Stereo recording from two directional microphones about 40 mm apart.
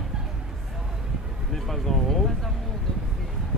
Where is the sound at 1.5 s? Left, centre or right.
Centre.